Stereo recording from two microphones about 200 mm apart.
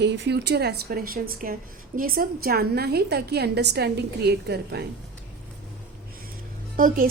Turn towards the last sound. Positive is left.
turn(degrees=-45)  # may be behind; listen again after turning